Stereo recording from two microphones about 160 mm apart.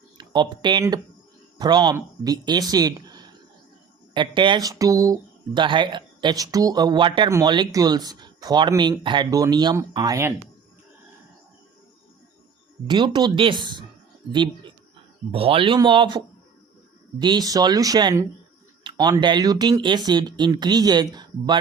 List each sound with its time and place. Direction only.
0.2 s speech: 30° right (ahead or behind)
12.9 s speech: 30° right (ahead or behind)